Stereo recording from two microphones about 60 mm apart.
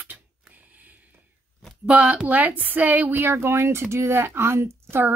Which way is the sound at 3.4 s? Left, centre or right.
Right.